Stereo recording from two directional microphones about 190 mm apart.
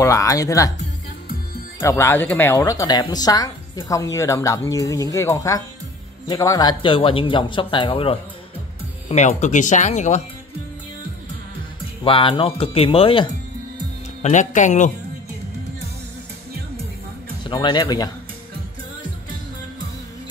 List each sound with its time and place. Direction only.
0.0 s a woman's voice: 15° left (ahead or behind)
1.8 s a woman's voice: 15° left (ahead or behind); by 10.2 s 40° left (ahead or behind)
12.0 s speech: 30° left (ahead or behind)
14.2 s speech: 40° left (ahead or behind)
17.5 s speech: 25° left (ahead or behind)